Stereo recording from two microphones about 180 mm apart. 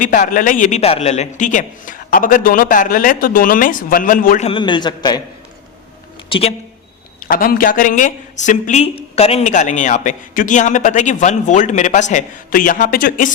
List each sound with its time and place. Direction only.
0.0 s speech: 45° left (ahead or behind)
4.4 s a man's voice: 30° left (ahead or behind)
6.2 s speech: 30° left (ahead or behind)
7.3 s speech: 50° left (ahead or behind)